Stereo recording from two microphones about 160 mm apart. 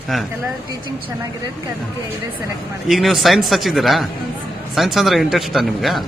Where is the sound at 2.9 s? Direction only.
Centre (ahead or behind).